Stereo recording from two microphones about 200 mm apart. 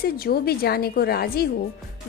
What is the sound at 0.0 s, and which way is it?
Speech, 50° left (ahead or behind).